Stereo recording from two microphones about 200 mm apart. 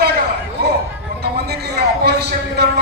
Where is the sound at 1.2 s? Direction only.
55° right (ahead or behind).